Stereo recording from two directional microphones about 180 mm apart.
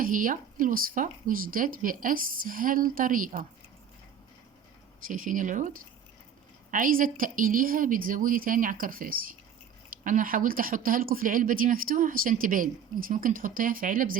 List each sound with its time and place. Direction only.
0.0 s speech: 50° right (ahead or behind)
5.0 s speech: 50° right (ahead or behind)